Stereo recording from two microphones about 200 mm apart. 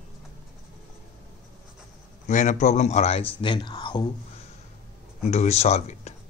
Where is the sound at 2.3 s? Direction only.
35° left (ahead or behind); by 4.1 s 20° left (ahead or behind).